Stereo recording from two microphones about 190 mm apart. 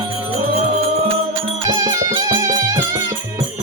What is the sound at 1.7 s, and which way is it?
Music, 20° right (ahead or behind).